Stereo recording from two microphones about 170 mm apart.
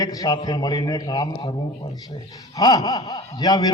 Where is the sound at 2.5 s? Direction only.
20° left (ahead or behind).